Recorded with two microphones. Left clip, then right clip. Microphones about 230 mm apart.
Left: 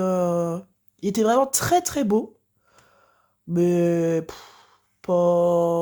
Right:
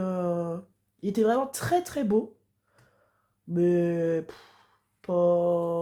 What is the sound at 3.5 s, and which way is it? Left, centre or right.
Speech, left.